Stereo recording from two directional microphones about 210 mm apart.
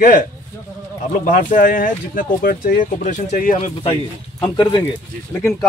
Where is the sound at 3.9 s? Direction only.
20° left (ahead or behind).